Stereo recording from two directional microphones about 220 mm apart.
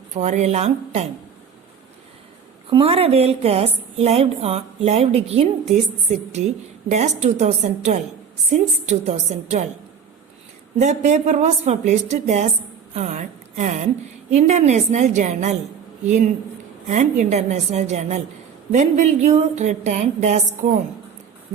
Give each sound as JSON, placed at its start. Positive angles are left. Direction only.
{"t": 0.1, "sound": "a woman's voice", "side_deg": -30}
{"t": 2.6, "sound": "a woman's voice", "side_deg": -25}
{"t": 6.8, "sound": "a woman's voice", "side_deg": -30}
{"t": 10.8, "sound": "a woman's voice", "side_deg": -30}